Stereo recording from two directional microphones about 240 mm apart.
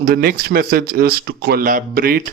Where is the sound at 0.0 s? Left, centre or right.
Right.